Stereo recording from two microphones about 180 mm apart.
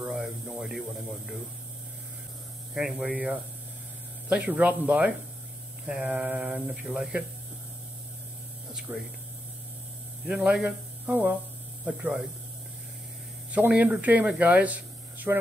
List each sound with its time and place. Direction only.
0.0 s a sound: 5° right (ahead or behind)
2.7 s speech: 5° right (ahead or behind)
8.9 s speech: 10° right (ahead or behind)
10.2 s speech: 5° right (ahead or behind)
13.5 s speech: 10° right (ahead or behind)